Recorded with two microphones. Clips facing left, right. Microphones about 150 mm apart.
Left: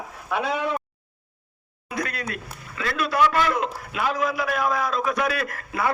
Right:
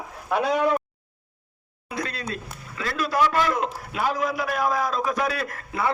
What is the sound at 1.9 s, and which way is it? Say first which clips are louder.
Speech: left 1 dB; 25° right (ahead or behind).